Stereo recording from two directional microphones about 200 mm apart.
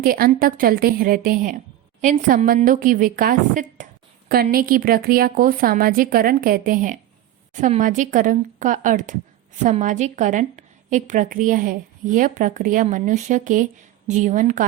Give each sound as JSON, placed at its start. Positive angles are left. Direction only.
{"t": 0.0, "sound": "a woman's voice", "side_deg": -45}